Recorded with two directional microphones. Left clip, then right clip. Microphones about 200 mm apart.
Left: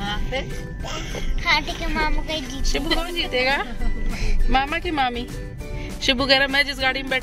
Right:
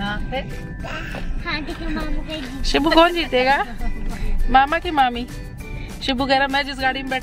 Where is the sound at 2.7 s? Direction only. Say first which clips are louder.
Right 9 dB; 35° right (ahead or behind).